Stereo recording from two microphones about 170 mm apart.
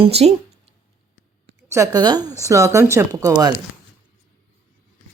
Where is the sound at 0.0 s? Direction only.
35° right (ahead or behind).